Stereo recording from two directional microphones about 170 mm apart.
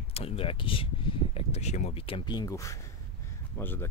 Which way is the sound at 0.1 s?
35° left (ahead or behind).